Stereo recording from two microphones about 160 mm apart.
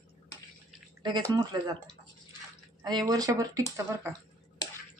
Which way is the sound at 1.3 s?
25° right (ahead or behind).